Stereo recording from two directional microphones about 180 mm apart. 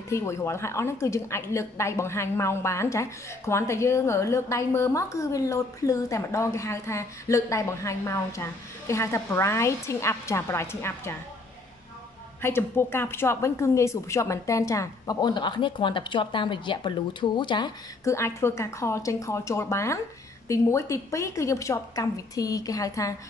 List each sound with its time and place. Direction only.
0.1 s a woman's voice: 15° left (ahead or behind)
12.4 s a woman's voice: 15° left (ahead or behind)